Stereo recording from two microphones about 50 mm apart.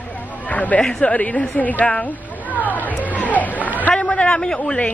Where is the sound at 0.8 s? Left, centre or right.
Centre.